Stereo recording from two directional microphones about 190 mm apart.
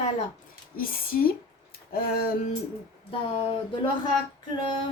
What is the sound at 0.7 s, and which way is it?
A woman's voice, 50° left (ahead or behind).